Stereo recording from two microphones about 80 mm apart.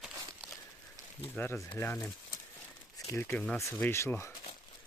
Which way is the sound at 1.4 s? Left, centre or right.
Left.